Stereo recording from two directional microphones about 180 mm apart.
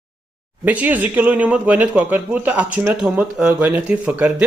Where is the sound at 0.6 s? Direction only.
10° right (ahead or behind).